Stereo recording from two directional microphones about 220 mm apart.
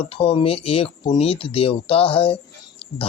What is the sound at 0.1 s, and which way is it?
Speech, 25° left (ahead or behind).